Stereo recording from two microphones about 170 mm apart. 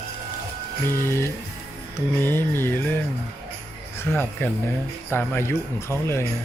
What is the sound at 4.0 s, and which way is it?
Speech, 10° left (ahead or behind).